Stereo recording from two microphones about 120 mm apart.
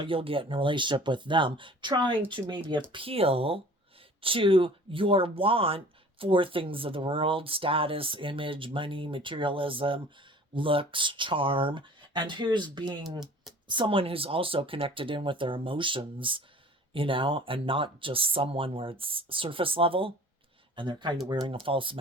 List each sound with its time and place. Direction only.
0.0 s speech: 50° right (ahead or behind)
13.0 s speech: 5° right (ahead or behind)
13.7 s speech: 45° right (ahead or behind)